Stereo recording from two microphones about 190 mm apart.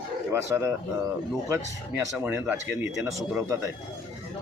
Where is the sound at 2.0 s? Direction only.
10° right (ahead or behind).